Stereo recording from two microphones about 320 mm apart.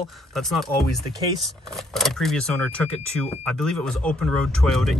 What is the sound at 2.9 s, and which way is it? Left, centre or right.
Speech, centre.